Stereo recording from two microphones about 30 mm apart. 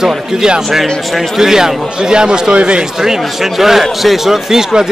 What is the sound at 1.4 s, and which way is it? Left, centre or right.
Speech, centre.